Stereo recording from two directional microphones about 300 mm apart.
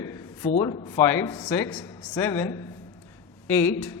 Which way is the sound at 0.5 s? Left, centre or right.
Centre.